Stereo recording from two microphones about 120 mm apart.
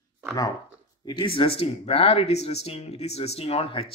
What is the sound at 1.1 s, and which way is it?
Speech, 40° left (ahead or behind).